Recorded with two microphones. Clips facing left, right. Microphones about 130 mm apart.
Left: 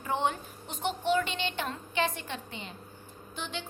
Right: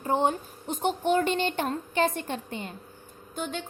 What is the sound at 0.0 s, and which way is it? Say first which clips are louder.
Speech: right 5 dB; 40° right (ahead or behind).